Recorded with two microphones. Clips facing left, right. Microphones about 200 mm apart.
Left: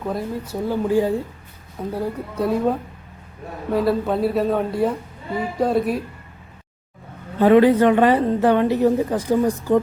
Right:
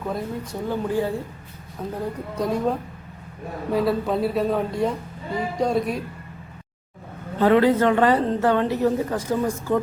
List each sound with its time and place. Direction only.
0.0 s speech: centre (ahead or behind)
0.7 s a woman's voice: 15° left (ahead or behind)
7.3 s a woman's voice: 15° left (ahead or behind)